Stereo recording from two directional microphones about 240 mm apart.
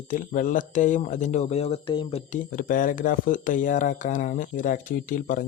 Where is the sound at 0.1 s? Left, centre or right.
Left.